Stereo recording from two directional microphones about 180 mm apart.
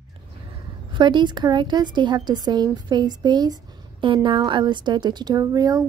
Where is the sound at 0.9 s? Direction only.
25° right (ahead or behind).